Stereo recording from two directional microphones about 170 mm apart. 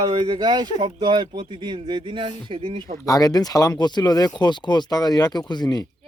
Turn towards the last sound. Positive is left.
turn(degrees=25)  # may be behind; listen again after turning